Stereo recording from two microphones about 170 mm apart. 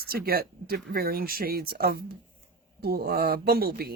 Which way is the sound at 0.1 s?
65° right (ahead or behind).